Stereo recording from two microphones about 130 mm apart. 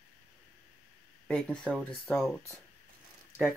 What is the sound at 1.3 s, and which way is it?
Speech, 5° left (ahead or behind).